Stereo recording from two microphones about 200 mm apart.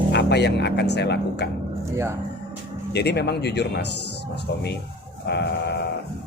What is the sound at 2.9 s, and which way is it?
Speech, 55° left (ahead or behind).